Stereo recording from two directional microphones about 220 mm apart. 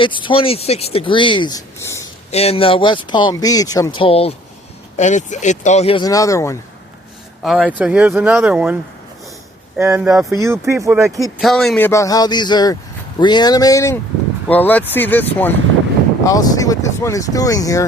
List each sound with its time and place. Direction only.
0.0 s speech: 20° left (ahead or behind)
2.3 s speech: 30° left (ahead or behind)
7.4 s speech: centre (ahead or behind)
10.3 s speech: 15° right (ahead or behind)
11.3 s speech: centre (ahead or behind)
11.9 s speech: 15° left (ahead or behind)